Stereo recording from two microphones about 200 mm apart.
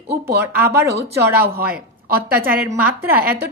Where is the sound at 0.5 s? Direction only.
15° right (ahead or behind).